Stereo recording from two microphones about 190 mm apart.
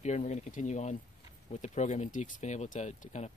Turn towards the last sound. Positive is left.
turn(degrees=35)  # may be behind; listen again after turning